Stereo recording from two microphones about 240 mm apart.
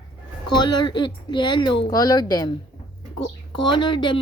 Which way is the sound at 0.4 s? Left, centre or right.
Centre.